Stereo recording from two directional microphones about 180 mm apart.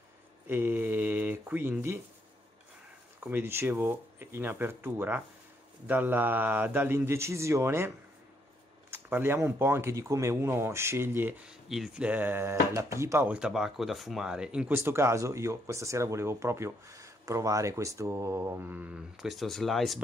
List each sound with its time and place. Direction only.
0.5 s a sound: 10° right (ahead or behind)
3.3 s speech: 10° right (ahead or behind)
8.9 s speech: 10° right (ahead or behind)